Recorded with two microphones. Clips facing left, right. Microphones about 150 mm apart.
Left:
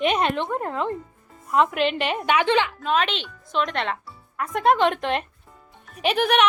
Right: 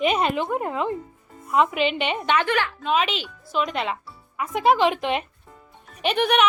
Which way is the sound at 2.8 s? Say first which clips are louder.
Even; centre (ahead or behind).